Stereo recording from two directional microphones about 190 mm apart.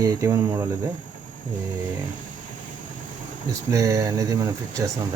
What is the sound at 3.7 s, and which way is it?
Speech, 15° right (ahead or behind).